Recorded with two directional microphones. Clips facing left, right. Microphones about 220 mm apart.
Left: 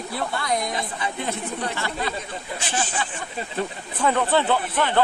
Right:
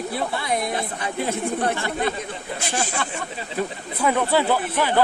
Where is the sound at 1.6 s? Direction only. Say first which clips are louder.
Right 4 dB; 50° right (ahead or behind).